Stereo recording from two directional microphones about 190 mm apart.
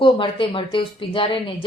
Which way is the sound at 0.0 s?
25° left (ahead or behind).